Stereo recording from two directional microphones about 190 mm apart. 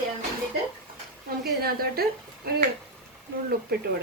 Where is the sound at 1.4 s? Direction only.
55° right (ahead or behind).